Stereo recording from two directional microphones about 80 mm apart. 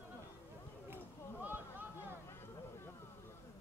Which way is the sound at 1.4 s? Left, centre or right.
Right.